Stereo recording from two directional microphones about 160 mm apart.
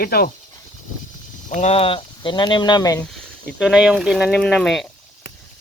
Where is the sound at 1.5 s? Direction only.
45° left (ahead or behind); by 3.0 s 25° left (ahead or behind).